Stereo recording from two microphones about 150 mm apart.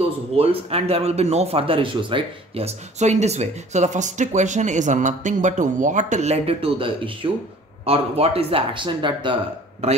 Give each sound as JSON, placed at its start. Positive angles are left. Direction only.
{"t": 0.4, "sound": "speech", "side_deg": -40}